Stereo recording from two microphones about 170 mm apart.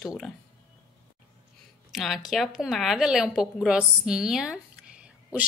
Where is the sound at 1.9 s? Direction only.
Centre (ahead or behind).